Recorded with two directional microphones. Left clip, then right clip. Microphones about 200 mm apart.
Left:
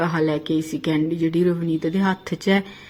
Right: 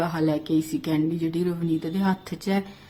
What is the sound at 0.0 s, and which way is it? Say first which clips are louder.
Speech: left 3 dB; 15° left (ahead or behind).